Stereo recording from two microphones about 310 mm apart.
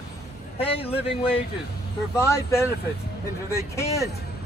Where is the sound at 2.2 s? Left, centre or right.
Centre.